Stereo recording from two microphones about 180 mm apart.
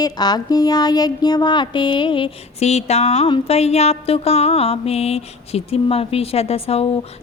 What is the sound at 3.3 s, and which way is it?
Mantra, 35° left (ahead or behind).